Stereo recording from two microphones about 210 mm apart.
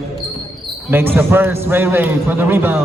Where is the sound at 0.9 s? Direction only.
10° right (ahead or behind).